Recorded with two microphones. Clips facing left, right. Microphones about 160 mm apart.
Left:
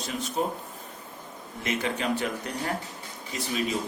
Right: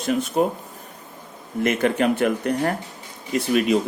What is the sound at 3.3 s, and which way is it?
Speech, 70° right (ahead or behind).